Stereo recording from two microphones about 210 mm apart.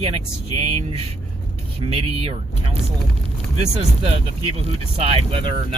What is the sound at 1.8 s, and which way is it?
Speech, 25° right (ahead or behind).